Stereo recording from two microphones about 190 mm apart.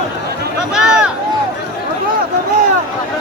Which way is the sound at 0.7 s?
5° right (ahead or behind).